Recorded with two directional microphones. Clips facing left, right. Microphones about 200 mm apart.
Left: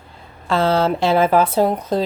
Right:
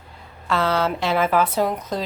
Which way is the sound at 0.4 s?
30° left (ahead or behind).